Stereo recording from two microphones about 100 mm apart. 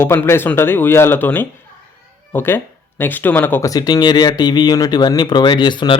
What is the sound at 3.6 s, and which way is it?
Speech, 40° left (ahead or behind).